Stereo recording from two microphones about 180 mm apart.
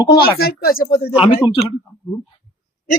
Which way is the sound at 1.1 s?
35° left (ahead or behind).